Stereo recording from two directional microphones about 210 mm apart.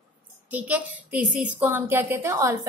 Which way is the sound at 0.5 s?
5° right (ahead or behind).